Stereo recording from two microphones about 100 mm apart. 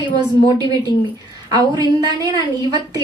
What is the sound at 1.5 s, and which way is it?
Speech, 40° right (ahead or behind).